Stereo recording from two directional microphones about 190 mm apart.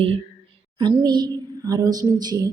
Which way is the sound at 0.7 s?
20° right (ahead or behind).